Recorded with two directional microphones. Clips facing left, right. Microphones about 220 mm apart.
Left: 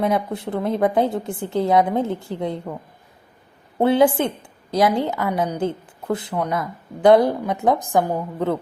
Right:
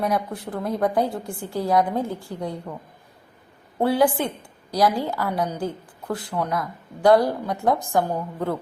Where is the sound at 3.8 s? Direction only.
20° left (ahead or behind).